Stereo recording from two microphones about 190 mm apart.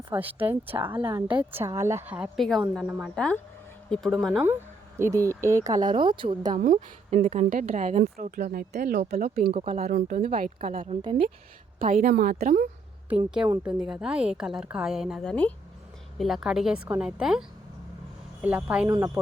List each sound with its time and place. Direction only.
0.1 s a woman's voice: 10° right (ahead or behind)
4.9 s speech: 15° right (ahead or behind)
6.6 s a woman's voice: 45° right (ahead or behind)
8.0 s speech: 50° right (ahead or behind)
9.5 s a woman's voice: 35° right (ahead or behind)
10.4 s speech: 45° right (ahead or behind)
11.0 s speech: 25° right (ahead or behind)
11.8 s speech: 45° right (ahead or behind)
13.6 s a woman's voice: 5° right (ahead or behind)
18.4 s a woman's voice: 5° right (ahead or behind)
18.9 s a woman's voice: 15° right (ahead or behind)